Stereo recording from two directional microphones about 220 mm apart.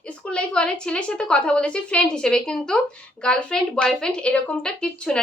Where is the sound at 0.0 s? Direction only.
5° left (ahead or behind).